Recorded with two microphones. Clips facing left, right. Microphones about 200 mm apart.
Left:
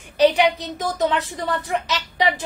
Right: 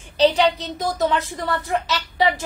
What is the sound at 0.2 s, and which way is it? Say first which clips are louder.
A woman's voice: left 1 dB; 10° left (ahead or behind).